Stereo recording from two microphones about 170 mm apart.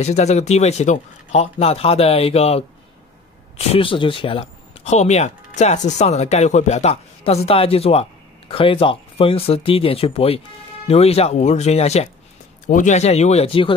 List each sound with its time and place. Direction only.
0.0 s speech: 40° left (ahead or behind)